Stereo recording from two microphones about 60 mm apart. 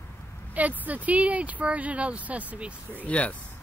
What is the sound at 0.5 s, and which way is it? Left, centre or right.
Speech, right.